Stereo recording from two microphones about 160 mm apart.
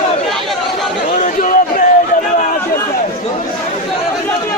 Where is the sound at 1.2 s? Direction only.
55° left (ahead or behind).